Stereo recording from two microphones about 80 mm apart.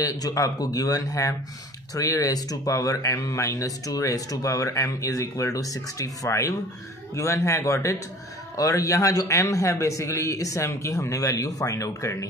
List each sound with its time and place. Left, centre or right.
0.0 s a man's voice: left